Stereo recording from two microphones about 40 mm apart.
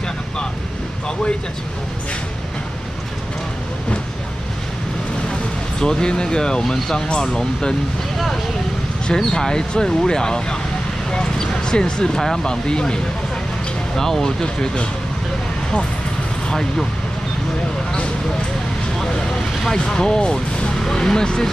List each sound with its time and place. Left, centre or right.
5.8 s speech: centre
9.0 s speech: centre
14.4 s speech: left
16.4 s speech: centre
19.7 s speech: left